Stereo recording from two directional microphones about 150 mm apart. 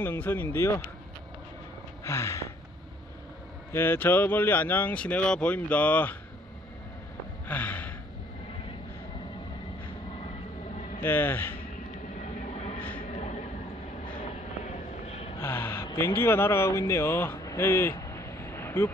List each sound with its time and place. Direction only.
0.0 s speech: 15° left (ahead or behind)
2.0 s gasp: 20° left (ahead or behind)
3.7 s speech: 15° left (ahead or behind)
7.4 s gasp: 10° left (ahead or behind)
11.0 s speech: 15° left (ahead or behind)
13.1 s train: 50° left (ahead or behind)
15.0 s gasp: 40° left (ahead or behind)
15.4 s a sound: 15° left (ahead or behind)
16.2 s speech: 15° left (ahead or behind)